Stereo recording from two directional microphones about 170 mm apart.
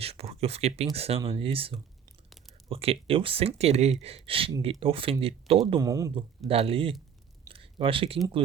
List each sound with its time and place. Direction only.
0.0 s speech: 35° right (ahead or behind)
5.8 s speech: 20° right (ahead or behind)
6.5 s speech: 35° right (ahead or behind)
7.5 s a sound: 30° right (ahead or behind)